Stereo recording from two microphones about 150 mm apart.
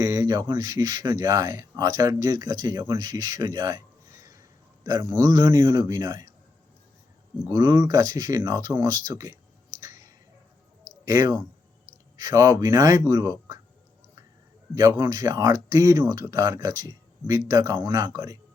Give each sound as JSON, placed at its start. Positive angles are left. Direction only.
{"t": 0.0, "sound": "speech", "side_deg": -25}
{"t": 7.5, "sound": "speech", "side_deg": -30}
{"t": 9.8, "sound": "clicking", "side_deg": -25}
{"t": 11.0, "sound": "speech", "side_deg": -25}
{"t": 14.8, "sound": "speech", "side_deg": -25}